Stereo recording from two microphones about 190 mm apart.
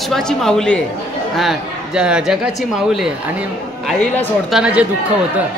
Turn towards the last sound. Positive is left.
turn(degrees=-5)  # may be behind; listen again after turning